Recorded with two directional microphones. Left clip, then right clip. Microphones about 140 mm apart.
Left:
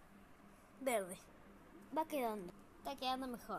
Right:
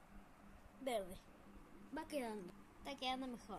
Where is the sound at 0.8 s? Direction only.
20° left (ahead or behind).